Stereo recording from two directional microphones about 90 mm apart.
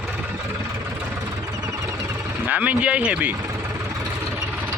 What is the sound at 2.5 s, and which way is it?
Speech, 15° right (ahead or behind).